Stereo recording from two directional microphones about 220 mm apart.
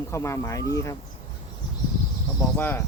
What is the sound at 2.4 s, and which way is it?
Speech, 10° left (ahead or behind).